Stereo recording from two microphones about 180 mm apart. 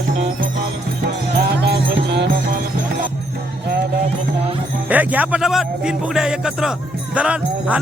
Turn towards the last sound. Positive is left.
turn(degrees=-5)  # may be behind; listen again after turning